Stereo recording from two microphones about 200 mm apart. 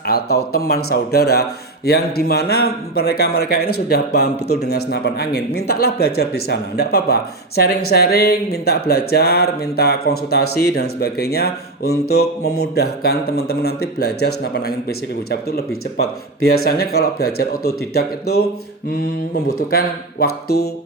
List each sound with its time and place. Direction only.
0.0 s speech: 55° left (ahead or behind)
19.7 s speech: 50° left (ahead or behind)